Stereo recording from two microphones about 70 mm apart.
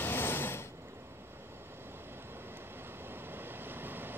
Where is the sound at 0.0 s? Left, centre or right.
Left.